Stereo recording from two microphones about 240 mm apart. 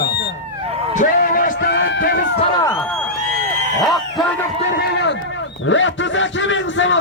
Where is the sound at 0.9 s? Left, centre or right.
Left.